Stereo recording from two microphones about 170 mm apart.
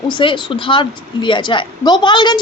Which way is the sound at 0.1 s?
30° left (ahead or behind).